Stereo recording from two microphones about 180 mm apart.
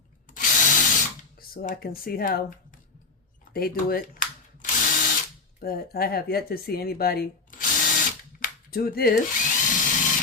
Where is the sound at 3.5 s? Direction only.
55° left (ahead or behind).